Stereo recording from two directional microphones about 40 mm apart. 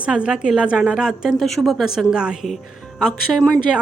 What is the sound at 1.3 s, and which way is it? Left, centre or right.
Speech, centre.